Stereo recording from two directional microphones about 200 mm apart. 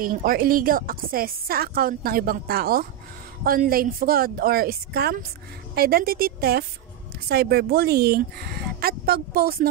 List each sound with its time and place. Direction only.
0.0 s speech: 45° right (ahead or behind)